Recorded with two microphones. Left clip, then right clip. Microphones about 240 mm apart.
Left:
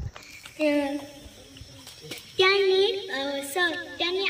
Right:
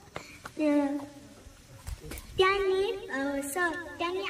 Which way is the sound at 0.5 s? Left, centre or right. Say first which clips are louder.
Left 3 dB; centre.